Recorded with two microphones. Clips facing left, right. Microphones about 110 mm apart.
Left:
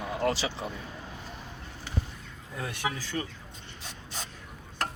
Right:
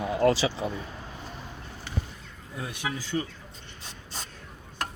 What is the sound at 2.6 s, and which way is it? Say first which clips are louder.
Speech: even; 15° right (ahead or behind).